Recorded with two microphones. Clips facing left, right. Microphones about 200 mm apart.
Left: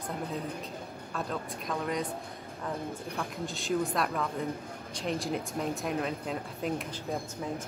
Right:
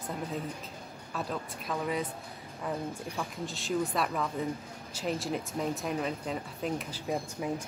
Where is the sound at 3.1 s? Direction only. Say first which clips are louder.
Left 1 dB; centre (ahead or behind).